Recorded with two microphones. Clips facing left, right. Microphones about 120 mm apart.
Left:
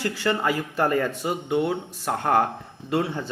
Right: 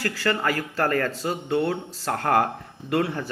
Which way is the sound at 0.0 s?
25° left (ahead or behind).